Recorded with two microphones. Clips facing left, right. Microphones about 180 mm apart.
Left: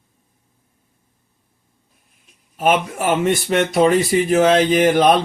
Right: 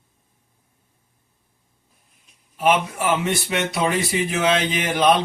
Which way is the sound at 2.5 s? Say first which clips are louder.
Left 2 dB; 45° left (ahead or behind).